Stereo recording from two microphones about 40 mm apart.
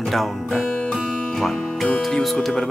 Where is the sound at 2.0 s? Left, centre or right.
Centre.